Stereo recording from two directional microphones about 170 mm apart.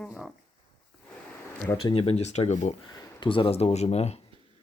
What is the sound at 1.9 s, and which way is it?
Speech, 35° left (ahead or behind).